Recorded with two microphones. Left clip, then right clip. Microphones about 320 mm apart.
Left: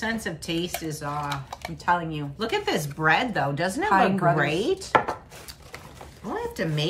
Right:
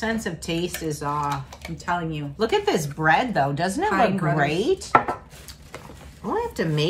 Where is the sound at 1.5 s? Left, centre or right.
Centre.